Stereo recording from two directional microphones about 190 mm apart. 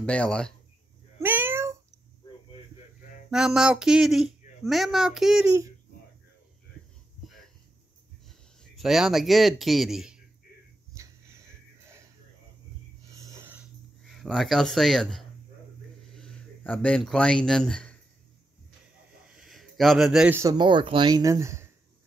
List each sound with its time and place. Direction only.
0.0 s speech: 5° left (ahead or behind)
1.2 s cat: 10° right (ahead or behind)
3.3 s speech: 5° right (ahead or behind)
8.3 s speech: centre (ahead or behind)
11.0 s a sound: 15° right (ahead or behind)
13.1 s a sound: 15° right (ahead or behind)
14.0 s a man's voice: centre (ahead or behind)
19.3 s speech: centre (ahead or behind)